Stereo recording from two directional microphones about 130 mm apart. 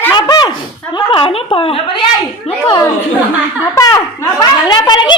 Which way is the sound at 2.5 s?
45° left (ahead or behind).